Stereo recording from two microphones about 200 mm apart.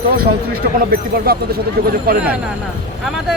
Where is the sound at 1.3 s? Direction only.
50° right (ahead or behind).